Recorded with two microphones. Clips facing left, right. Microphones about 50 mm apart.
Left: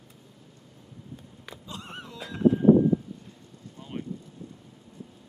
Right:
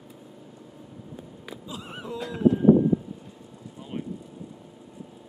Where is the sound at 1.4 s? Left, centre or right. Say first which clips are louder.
Right 2 dB; centre.